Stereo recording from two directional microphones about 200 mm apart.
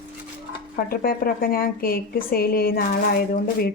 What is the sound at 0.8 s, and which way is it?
Speech, 45° left (ahead or behind).